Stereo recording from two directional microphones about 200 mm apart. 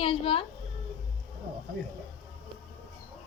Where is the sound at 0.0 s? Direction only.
25° left (ahead or behind).